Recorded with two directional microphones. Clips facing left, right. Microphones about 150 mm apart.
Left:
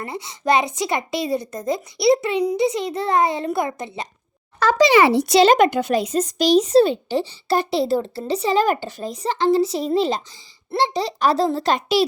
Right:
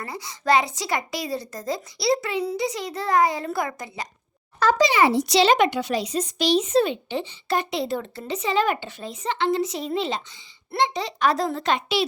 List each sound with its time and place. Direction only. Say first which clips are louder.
0.0 s speech: left 3 dB; 25° left (ahead or behind)
4.6 s a child's voice: left 4 dB; 80° left; by 12.0 s 40° left (ahead or behind)